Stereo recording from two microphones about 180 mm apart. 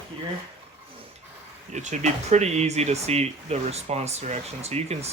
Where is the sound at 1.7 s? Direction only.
40° right (ahead or behind).